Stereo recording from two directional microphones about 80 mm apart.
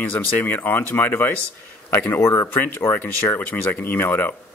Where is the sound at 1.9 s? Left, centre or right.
Left.